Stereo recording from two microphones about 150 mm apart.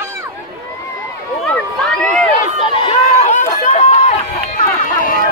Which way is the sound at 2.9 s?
45° left (ahead or behind).